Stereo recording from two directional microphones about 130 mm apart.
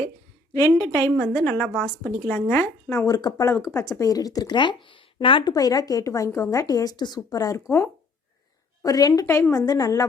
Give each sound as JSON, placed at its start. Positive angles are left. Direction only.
{"t": 0.5, "sound": "speech", "side_deg": 25}
{"t": 1.1, "sound": "speech", "side_deg": 5}
{"t": 3.1, "sound": "speech", "side_deg": 30}
{"t": 5.5, "sound": "speech", "side_deg": 30}